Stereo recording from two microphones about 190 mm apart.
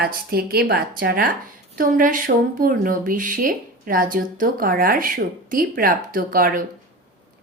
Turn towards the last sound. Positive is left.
turn(degrees=-50)  # may be behind; listen again after turning